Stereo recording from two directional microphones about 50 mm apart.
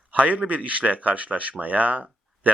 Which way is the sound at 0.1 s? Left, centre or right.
Right.